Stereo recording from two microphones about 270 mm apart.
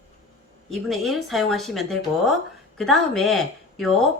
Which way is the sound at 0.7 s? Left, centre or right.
Centre.